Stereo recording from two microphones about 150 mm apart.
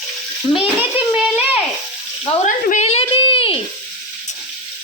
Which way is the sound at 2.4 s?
50° left (ahead or behind).